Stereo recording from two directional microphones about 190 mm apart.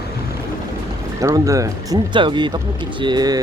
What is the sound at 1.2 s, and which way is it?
Speech, 15° right (ahead or behind).